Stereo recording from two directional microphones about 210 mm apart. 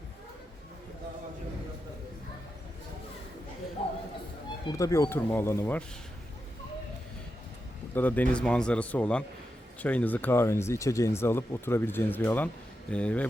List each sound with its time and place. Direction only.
3.8 s a sound: 30° left (ahead or behind)
4.6 s speech: 15° left (ahead or behind)
7.9 s speech: 10° left (ahead or behind)